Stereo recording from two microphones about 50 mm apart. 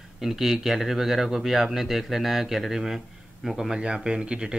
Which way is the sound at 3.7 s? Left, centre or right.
Centre.